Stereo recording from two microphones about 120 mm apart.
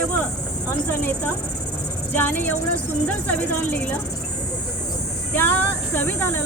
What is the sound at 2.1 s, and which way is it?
Speech, 15° left (ahead or behind).